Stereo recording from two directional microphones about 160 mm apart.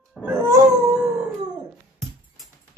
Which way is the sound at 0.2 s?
15° right (ahead or behind).